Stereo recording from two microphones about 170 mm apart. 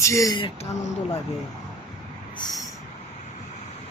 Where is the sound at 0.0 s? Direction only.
20° left (ahead or behind).